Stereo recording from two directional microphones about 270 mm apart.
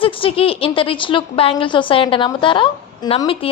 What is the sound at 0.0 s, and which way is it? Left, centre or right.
A woman's voice, left.